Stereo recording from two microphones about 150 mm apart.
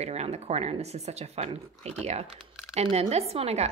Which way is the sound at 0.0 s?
45° right (ahead or behind).